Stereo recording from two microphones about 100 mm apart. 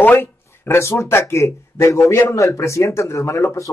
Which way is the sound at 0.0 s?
25° left (ahead or behind).